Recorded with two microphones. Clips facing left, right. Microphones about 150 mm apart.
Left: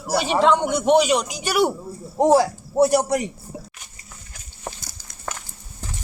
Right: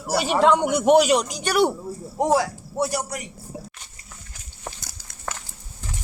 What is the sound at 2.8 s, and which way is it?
Speech, 55° left (ahead or behind).